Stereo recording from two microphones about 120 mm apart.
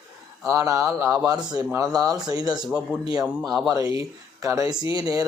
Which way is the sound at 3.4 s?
Centre (ahead or behind).